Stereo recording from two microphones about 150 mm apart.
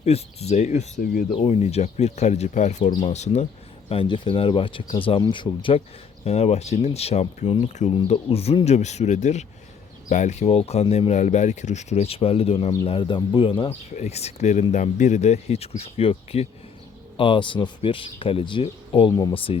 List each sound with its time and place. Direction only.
0.0 s speech: 45° left (ahead or behind)
1.0 s speech: 70° left (ahead or behind)
1.3 s speech: 40° left (ahead or behind)
3.8 s speech: 35° left (ahead or behind)
6.2 s speech: 45° left (ahead or behind)
13.9 s speech: 50° left (ahead or behind); by 19.5 s 30° left (ahead or behind)